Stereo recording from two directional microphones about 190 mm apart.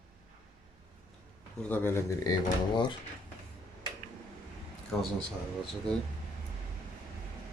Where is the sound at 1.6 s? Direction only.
10° left (ahead or behind).